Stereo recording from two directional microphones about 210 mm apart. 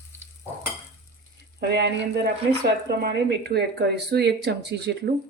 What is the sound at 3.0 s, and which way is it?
Speech, 50° right (ahead or behind).